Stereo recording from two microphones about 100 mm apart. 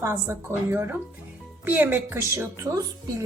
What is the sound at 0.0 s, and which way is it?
A woman's voice, 25° right (ahead or behind).